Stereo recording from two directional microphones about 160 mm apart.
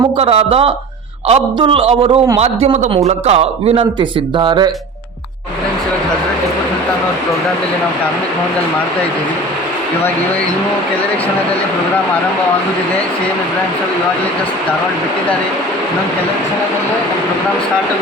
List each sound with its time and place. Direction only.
0.2 s a man's voice: 40° right (ahead or behind)